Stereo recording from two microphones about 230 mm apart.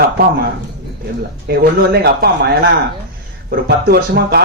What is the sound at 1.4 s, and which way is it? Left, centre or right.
Speech, right.